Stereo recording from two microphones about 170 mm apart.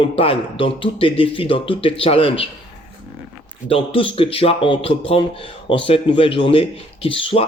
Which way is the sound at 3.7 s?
30° left (ahead or behind).